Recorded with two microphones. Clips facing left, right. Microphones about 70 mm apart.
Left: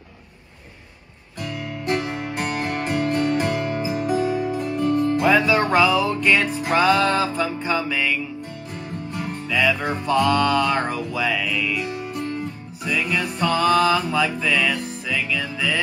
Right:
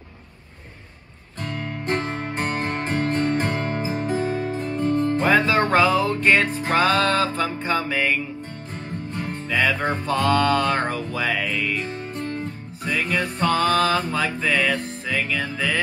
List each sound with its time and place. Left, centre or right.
1.4 s music: right